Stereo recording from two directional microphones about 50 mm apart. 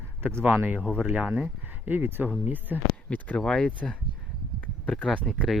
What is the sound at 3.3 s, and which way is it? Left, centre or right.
Speech, centre.